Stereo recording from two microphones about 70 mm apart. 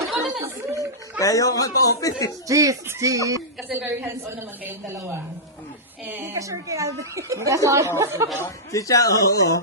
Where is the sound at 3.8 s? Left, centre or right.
Right.